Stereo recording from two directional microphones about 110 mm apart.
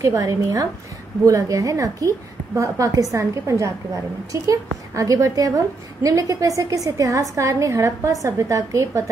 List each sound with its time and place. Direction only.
0.0 s a woman's voice: 30° right (ahead or behind)
4.9 s a woman's voice: 30° right (ahead or behind)